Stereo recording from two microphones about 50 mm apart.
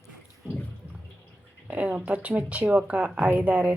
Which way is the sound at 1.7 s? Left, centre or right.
Right.